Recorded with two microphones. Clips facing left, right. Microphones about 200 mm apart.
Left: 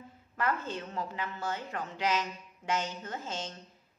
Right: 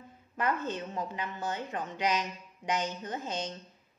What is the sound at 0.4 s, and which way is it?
A woman's voice, 20° right (ahead or behind).